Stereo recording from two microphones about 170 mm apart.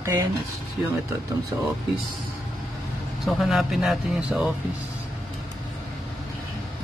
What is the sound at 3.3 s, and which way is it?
Speech, centre (ahead or behind).